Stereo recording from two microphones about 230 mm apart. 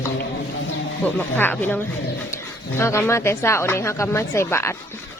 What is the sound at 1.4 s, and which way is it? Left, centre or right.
Speech, centre.